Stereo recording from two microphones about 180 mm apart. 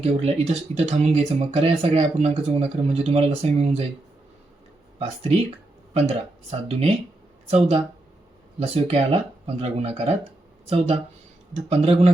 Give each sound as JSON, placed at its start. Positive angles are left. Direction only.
{"t": 0.0, "sound": "speech", "side_deg": -35}
{"t": 4.9, "sound": "speech", "side_deg": -35}